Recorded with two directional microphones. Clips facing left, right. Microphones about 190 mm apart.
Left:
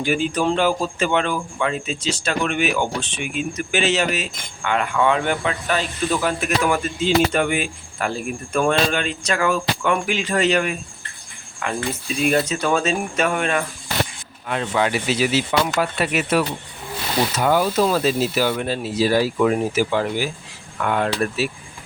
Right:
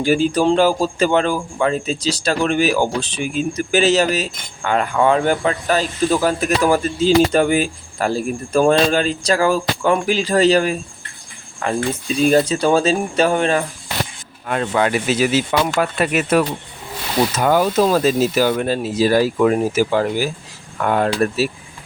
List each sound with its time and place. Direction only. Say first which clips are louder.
0.0 s speech: right 5 dB; 35° right (ahead or behind)
14.4 s speech: right 3 dB; 50° right (ahead or behind)